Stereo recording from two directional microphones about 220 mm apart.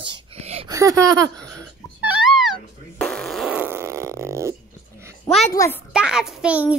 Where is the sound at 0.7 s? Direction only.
15° right (ahead or behind).